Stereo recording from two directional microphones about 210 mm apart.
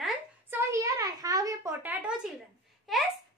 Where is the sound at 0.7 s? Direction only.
15° right (ahead or behind).